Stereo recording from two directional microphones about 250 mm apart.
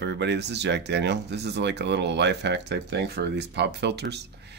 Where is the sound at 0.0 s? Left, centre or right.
Right.